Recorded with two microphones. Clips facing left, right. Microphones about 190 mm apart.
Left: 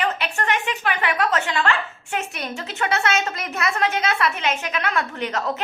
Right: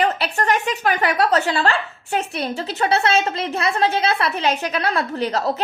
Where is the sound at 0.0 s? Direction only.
40° right (ahead or behind).